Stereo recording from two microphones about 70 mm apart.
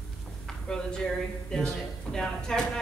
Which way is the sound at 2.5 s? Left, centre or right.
Centre.